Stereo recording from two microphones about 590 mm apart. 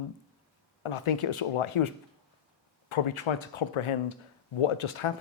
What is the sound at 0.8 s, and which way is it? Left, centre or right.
Speech, left.